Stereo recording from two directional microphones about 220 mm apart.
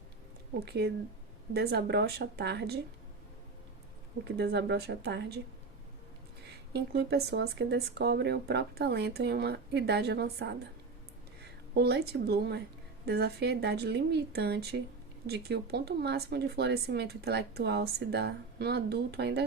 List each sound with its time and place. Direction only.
0.6 s speech: 50° right (ahead or behind)
4.4 s speech: 50° right (ahead or behind)
6.7 s speech: 50° right (ahead or behind)
11.7 s speech: 50° right (ahead or behind)